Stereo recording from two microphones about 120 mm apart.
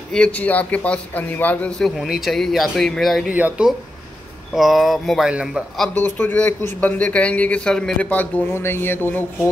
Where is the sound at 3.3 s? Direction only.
15° right (ahead or behind).